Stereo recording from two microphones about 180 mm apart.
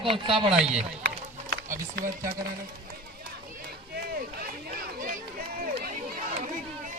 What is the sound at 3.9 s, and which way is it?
Run, 60° right (ahead or behind).